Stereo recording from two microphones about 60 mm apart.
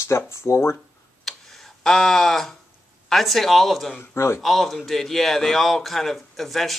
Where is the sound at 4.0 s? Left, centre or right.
Left.